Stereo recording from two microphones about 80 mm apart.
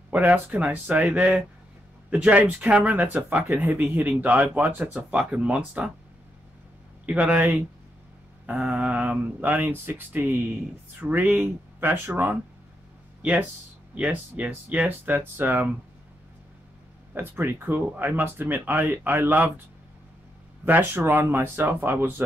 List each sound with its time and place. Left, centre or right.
0.1 s speech: centre
7.1 s speech: centre
13.9 s speech: centre
17.1 s speech: right
20.6 s speech: right